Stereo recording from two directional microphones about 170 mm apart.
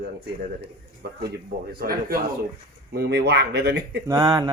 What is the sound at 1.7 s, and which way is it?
Speech, 65° right (ahead or behind).